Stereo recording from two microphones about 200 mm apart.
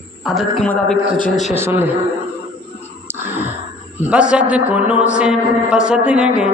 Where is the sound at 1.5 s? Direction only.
10° right (ahead or behind).